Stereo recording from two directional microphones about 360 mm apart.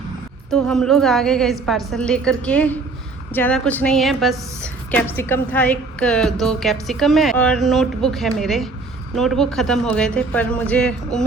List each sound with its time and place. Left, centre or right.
0.5 s a woman's voice: centre